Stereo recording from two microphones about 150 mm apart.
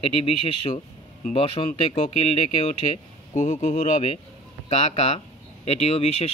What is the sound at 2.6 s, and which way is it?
Speech, 50° left (ahead or behind).